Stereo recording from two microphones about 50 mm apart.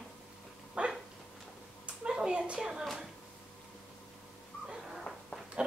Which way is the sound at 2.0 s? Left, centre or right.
Centre.